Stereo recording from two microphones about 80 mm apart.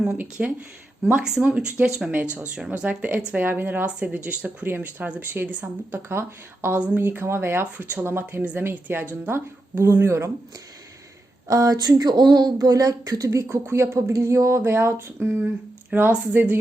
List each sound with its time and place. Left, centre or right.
0.2 s speech: centre
6.7 s speech: centre; by 10.3 s right
11.4 s speech: right
13.5 s speech: right